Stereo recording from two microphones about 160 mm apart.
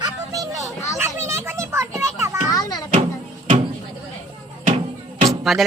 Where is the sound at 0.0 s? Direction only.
20° right (ahead or behind).